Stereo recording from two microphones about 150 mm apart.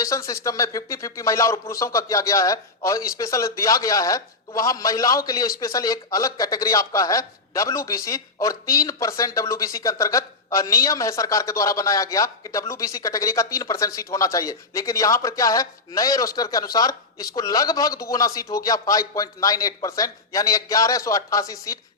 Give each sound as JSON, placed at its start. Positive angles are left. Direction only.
{"t": 0.0, "sound": "speech", "side_deg": 20}